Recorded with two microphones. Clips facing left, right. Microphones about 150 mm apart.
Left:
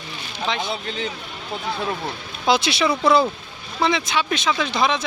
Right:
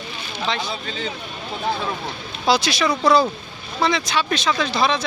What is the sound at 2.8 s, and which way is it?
Speech, 5° left (ahead or behind).